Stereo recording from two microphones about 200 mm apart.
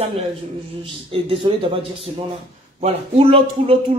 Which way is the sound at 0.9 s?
25° right (ahead or behind).